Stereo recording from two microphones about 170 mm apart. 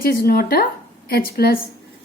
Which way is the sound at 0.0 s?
60° left (ahead or behind).